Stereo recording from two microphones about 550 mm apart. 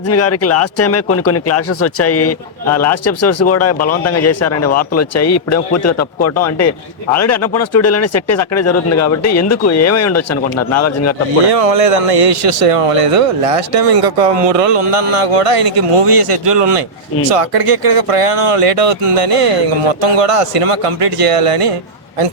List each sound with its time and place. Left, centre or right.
0.1 s speech: left
7.2 s speech: left
11.5 s speech: right